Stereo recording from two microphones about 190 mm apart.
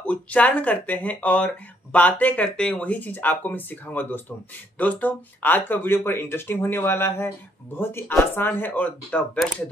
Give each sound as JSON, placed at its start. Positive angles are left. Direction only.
{"t": 0.0, "sound": "speech", "side_deg": 10}